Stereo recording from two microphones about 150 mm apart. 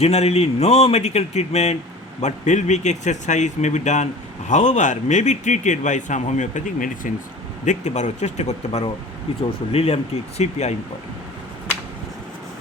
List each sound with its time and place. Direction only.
0.0 s speech: 45° left (ahead or behind)